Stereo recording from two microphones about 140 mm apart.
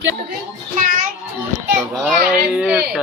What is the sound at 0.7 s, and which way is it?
Speech, 75° right (ahead or behind).